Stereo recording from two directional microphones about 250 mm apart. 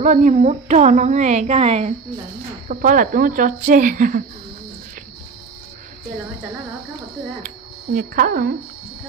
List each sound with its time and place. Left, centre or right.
0.0 s a woman's voice: right
7.4 s speech: right